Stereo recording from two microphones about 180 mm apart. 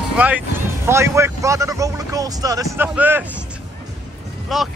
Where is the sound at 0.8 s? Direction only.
15° right (ahead or behind).